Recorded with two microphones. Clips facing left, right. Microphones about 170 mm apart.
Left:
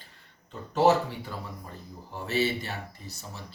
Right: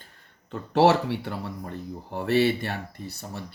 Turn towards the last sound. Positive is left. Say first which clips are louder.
# right 6 dB
turn(degrees=-60)  # may be behind; listen again after turning